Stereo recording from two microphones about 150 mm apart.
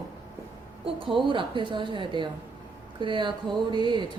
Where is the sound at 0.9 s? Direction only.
35° right (ahead or behind).